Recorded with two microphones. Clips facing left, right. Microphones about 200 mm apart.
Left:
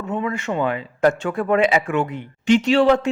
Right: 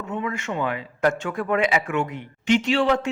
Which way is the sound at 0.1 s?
35° left (ahead or behind).